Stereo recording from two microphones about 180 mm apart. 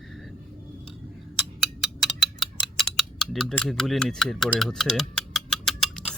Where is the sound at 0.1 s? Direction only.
Centre (ahead or behind).